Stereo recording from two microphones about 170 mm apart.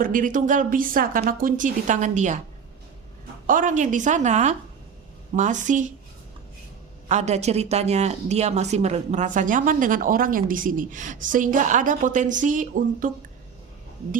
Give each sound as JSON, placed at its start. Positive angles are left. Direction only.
{"t": 0.0, "sound": "a woman's voice", "side_deg": -50}
{"t": 3.4, "sound": "a woman's voice", "side_deg": -50}
{"t": 7.1, "sound": "a woman's voice", "side_deg": -40}